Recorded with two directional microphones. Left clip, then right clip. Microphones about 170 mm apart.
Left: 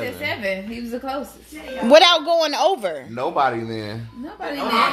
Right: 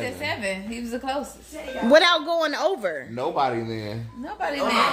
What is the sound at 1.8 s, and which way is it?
Speech, 5° left (ahead or behind).